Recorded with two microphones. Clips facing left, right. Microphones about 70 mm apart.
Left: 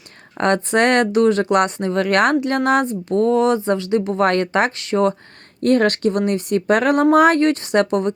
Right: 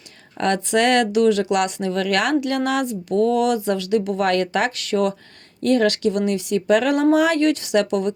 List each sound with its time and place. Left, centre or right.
0.3 s speech: left
5.6 s speech: left